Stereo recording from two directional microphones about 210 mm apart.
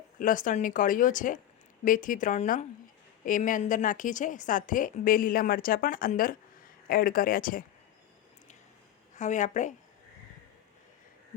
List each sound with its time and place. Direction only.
0.2 s a woman's voice: 40° left (ahead or behind)
9.1 s a woman's voice: 35° left (ahead or behind)